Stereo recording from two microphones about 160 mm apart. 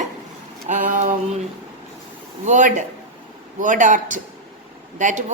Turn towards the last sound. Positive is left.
turn(degrees=-50)  # may be behind; listen again after turning